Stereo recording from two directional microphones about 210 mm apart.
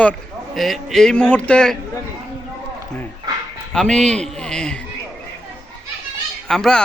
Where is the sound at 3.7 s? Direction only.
5° left (ahead or behind).